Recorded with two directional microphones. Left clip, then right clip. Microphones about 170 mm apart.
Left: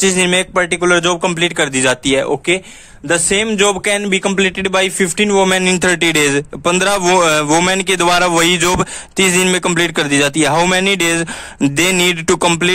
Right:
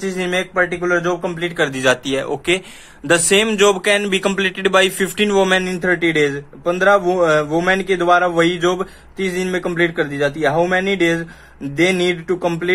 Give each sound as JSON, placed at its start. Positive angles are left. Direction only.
{"t": 0.0, "sound": "a man's voice", "side_deg": 85}
{"t": 3.1, "sound": "speech", "side_deg": 30}
{"t": 5.5, "sound": "a man's voice", "side_deg": 65}